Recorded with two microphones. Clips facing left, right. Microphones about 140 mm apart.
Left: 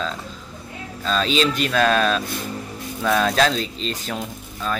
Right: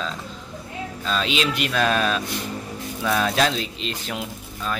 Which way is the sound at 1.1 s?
40° left (ahead or behind).